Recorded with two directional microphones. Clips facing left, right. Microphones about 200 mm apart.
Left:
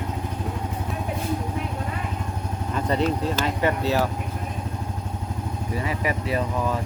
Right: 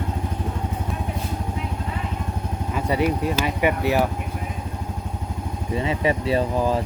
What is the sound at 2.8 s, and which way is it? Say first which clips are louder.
Speech: right 1 dB; 10° right (ahead or behind).